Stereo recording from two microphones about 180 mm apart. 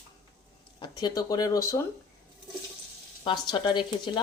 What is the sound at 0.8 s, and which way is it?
Speech, 20° left (ahead or behind).